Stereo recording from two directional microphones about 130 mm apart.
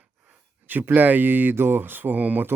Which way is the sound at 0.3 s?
15° right (ahead or behind).